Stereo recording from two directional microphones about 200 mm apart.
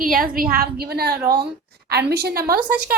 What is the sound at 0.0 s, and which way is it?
A woman's voice, 45° right (ahead or behind).